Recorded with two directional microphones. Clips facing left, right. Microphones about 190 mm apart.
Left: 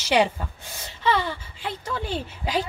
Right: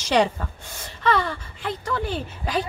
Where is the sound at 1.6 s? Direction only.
15° left (ahead or behind).